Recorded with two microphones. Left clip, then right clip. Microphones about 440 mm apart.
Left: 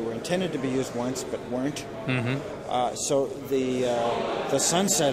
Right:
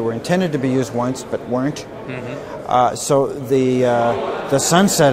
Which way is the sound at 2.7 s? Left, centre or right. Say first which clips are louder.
Right 11 dB; right.